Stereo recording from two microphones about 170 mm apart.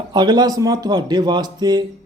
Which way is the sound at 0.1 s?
25° right (ahead or behind).